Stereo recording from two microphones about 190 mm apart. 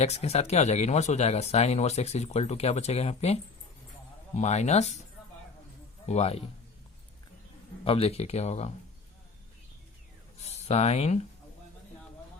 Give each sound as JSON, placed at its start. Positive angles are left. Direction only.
{"t": 0.0, "sound": "speech", "side_deg": 35}
{"t": 4.4, "sound": "speech", "side_deg": 35}
{"t": 6.1, "sound": "speech", "side_deg": 35}
{"t": 7.9, "sound": "speech", "side_deg": 30}
{"t": 10.4, "sound": "speech", "side_deg": 35}